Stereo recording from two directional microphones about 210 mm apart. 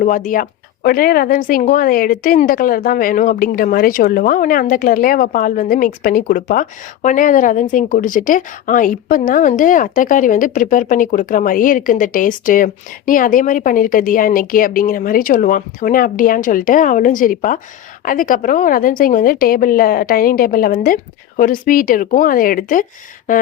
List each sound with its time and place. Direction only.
0.0 s speech: 40° left (ahead or behind)